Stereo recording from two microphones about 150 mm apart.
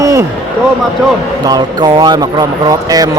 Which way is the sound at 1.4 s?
25° right (ahead or behind).